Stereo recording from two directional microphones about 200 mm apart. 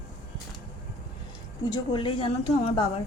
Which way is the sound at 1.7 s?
25° left (ahead or behind).